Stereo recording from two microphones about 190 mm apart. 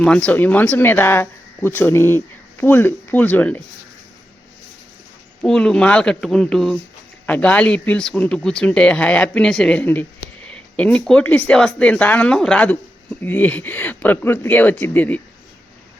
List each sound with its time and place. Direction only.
0.0 s speech: 5° left (ahead or behind)
5.4 s speech: 5° left (ahead or behind)